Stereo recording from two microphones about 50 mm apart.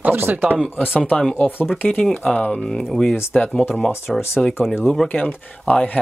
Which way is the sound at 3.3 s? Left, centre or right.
Left.